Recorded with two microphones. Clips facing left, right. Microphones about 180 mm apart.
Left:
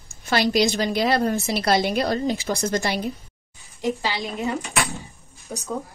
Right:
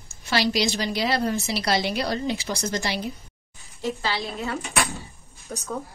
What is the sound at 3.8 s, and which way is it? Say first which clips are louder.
A woman's voice: left 2 dB; 15° left (ahead or behind).